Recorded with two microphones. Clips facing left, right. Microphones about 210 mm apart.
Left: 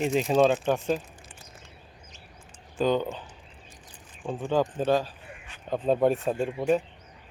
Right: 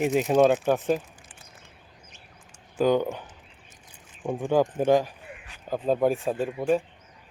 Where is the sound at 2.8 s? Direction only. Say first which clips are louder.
Right 3 dB; 10° right (ahead or behind).